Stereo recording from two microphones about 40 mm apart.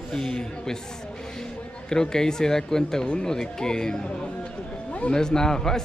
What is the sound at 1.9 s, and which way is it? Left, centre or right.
Speech, centre.